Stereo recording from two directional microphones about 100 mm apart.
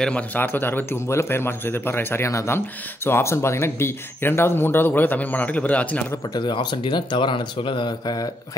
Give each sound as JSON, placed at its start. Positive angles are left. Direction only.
{"t": 0.0, "sound": "speech", "side_deg": 15}
{"t": 6.3, "sound": "speech", "side_deg": 50}